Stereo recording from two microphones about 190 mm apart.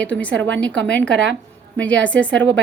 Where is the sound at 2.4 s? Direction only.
75° right (ahead or behind).